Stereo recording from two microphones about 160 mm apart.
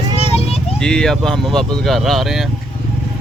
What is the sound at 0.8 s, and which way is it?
Speech, 5° left (ahead or behind).